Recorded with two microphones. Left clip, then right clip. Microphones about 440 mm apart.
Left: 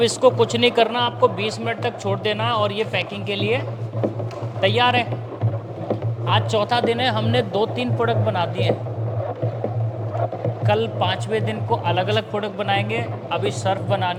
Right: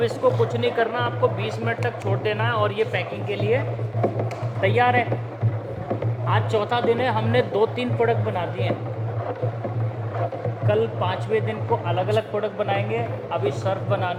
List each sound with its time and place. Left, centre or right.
0.0 s speech: left
4.6 s a man's voice: left
6.2 s a man's voice: left
10.7 s a man's voice: left